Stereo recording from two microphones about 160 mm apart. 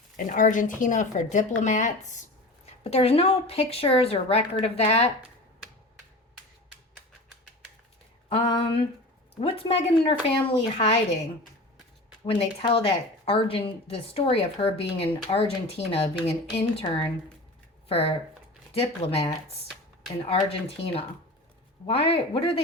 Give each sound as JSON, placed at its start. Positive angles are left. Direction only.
{"t": 0.3, "sound": "a woman's voice", "side_deg": 55}
{"t": 2.8, "sound": "a woman's voice", "side_deg": 40}
{"t": 8.3, "sound": "a woman's voice", "side_deg": 30}
{"t": 12.2, "sound": "a woman's voice", "side_deg": 35}
{"t": 20.7, "sound": "a woman's voice", "side_deg": 35}